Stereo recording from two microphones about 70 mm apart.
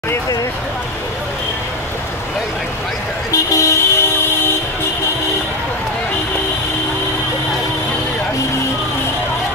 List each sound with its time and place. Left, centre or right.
3.3 s vehicle: left